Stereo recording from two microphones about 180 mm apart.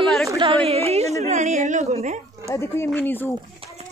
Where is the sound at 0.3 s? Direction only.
25° right (ahead or behind).